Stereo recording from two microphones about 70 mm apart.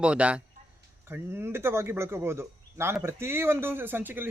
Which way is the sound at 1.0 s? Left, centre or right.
Right.